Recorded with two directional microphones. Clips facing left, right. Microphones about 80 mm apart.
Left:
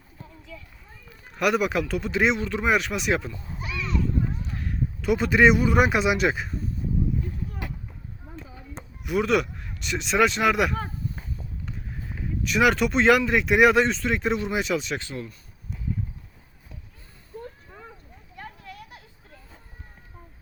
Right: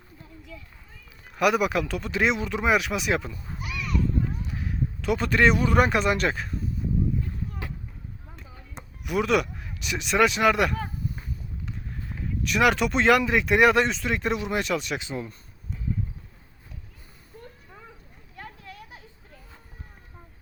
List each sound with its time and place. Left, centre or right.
1.4 s speech: centre
3.3 s a sound: left
4.5 s speech: centre
8.7 s speech: centre
12.0 s speech: centre
14.9 s speech: centre